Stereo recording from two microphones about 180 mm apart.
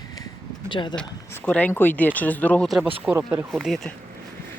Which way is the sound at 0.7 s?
25° left (ahead or behind).